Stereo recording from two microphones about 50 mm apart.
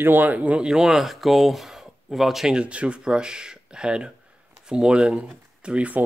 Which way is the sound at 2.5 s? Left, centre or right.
Right.